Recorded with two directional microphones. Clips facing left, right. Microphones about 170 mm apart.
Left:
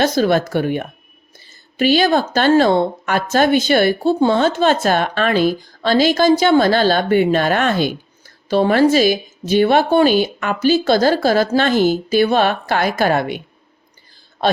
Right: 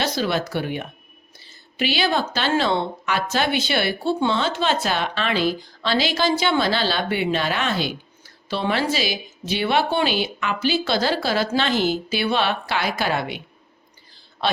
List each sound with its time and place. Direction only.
0.0 s a woman's voice: 50° left (ahead or behind)
14.4 s a man's voice: 45° left (ahead or behind)